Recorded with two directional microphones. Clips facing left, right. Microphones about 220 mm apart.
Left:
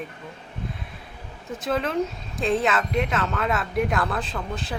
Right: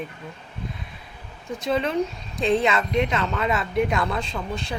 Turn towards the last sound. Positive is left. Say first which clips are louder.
# right 1 dB
turn(degrees=0)  # may be behind; listen again after turning